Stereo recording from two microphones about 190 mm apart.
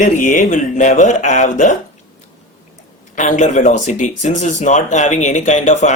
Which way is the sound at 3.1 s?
40° left (ahead or behind).